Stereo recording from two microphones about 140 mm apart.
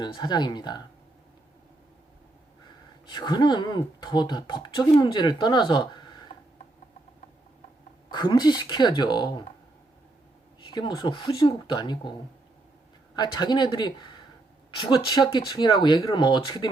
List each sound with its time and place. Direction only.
0.0 s speech: 30° left (ahead or behind)
3.1 s speech: 30° left (ahead or behind)
8.1 s speech: 35° left (ahead or behind)
10.7 s speech: 30° left (ahead or behind)
13.1 s speech: 30° left (ahead or behind)